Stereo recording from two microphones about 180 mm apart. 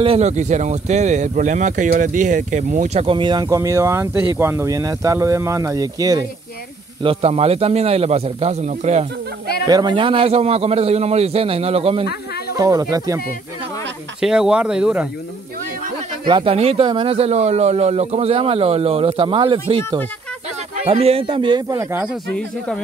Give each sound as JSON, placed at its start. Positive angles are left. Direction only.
{"t": 0.0, "sound": "speech", "side_deg": -35}
{"t": 7.0, "sound": "speech", "side_deg": -35}
{"t": 9.7, "sound": "speech", "side_deg": -25}
{"t": 12.5, "sound": "speech", "side_deg": -20}
{"t": 14.2, "sound": "speech", "side_deg": -5}
{"t": 16.3, "sound": "speech", "side_deg": -30}
{"t": 20.8, "sound": "speech", "side_deg": -35}